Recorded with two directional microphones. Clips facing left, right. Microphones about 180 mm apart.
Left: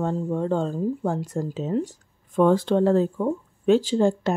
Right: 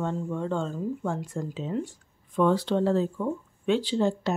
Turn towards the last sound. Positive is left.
turn(degrees=50)  # may be behind; listen again after turning